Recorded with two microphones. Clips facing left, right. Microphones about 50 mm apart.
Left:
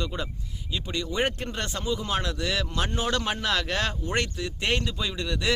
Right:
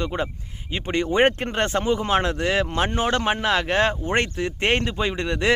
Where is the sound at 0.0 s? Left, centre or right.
Right.